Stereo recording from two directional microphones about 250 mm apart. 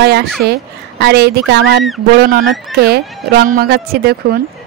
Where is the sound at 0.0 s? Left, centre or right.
Right.